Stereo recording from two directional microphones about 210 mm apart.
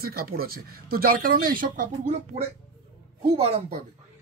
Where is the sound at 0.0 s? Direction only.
45° right (ahead or behind).